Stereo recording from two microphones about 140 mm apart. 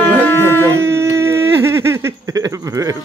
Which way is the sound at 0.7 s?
20° right (ahead or behind).